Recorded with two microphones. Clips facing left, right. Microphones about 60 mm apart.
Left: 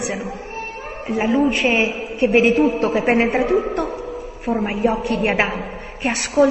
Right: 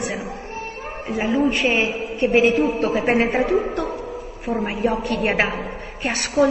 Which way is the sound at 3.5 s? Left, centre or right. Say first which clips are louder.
Left 2 dB; left.